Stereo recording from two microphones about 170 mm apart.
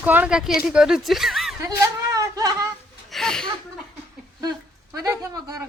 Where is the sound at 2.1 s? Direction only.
20° right (ahead or behind).